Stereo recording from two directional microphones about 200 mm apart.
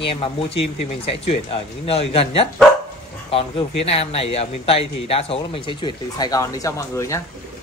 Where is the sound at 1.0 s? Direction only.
30° left (ahead or behind).